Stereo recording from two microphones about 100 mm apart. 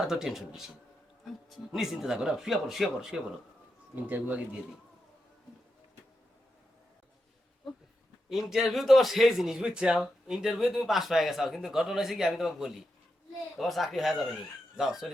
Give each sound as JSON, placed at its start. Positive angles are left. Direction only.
{"t": 0.1, "sound": "speech", "side_deg": -5}
{"t": 4.0, "sound": "speech", "side_deg": -15}
{"t": 8.3, "sound": "speech", "side_deg": -5}